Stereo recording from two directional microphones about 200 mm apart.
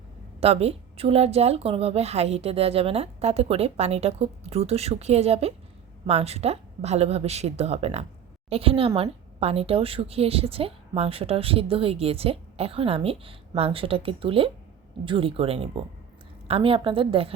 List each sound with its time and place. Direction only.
0.3 s a woman's voice: 30° right (ahead or behind)